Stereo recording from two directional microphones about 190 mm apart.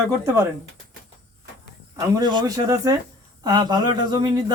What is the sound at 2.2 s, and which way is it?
Speech, 20° right (ahead or behind).